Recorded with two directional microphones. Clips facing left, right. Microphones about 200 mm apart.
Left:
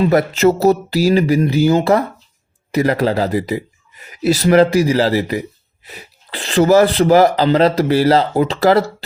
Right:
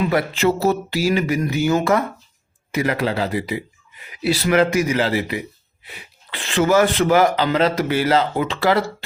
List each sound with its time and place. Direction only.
0.0 s speech: 40° left (ahead or behind)